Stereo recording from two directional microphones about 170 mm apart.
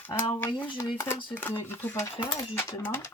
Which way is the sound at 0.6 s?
25° left (ahead or behind).